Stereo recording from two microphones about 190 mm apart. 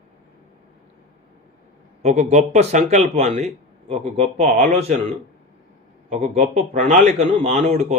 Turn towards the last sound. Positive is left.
turn(degrees=-35)  # may be behind; listen again after turning